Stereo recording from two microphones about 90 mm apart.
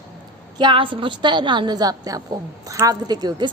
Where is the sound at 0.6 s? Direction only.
65° right (ahead or behind).